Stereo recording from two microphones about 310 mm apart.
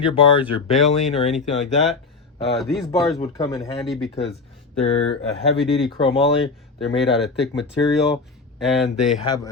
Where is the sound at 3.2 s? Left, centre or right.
Centre.